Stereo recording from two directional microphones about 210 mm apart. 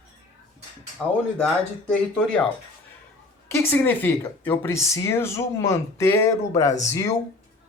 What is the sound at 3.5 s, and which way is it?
Speech, 10° left (ahead or behind).